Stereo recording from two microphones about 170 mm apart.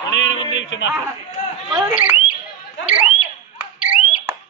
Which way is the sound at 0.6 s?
90° left.